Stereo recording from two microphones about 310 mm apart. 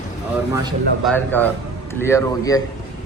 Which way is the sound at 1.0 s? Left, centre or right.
Centre.